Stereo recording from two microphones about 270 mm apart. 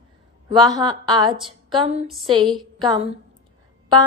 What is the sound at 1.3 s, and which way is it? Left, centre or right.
Speech, centre.